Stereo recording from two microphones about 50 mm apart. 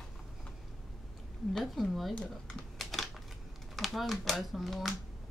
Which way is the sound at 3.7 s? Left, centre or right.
Centre.